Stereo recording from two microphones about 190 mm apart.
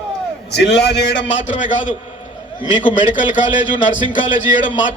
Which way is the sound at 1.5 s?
40° left (ahead or behind).